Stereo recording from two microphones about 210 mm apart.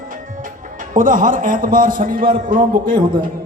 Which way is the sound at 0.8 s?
40° right (ahead or behind).